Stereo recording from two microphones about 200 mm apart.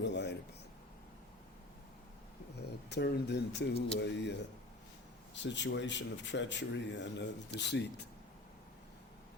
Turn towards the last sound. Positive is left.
turn(degrees=60)  # may be behind; listen again after turning